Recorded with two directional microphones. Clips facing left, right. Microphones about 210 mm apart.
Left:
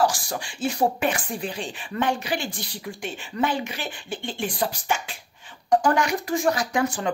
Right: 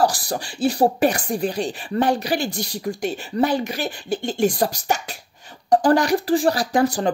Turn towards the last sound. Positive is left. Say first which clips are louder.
# right 5 dB
turn(degrees=-35)  # may be behind; listen again after turning